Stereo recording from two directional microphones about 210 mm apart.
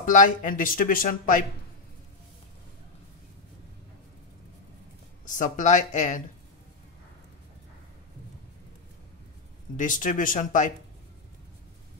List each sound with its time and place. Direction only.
0.0 s speech: 40° left (ahead or behind)
5.2 s speech: 35° left (ahead or behind)
9.8 s speech: 40° left (ahead or behind)